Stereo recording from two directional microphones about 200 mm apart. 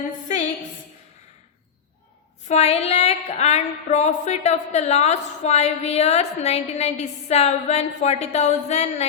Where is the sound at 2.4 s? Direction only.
35° left (ahead or behind).